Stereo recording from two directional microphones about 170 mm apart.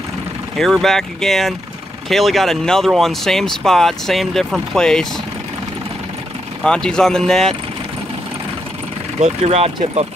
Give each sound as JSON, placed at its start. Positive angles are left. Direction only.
{"t": 0.6, "sound": "speech", "side_deg": 0}
{"t": 6.6, "sound": "speech", "side_deg": 5}
{"t": 9.2, "sound": "speech", "side_deg": -40}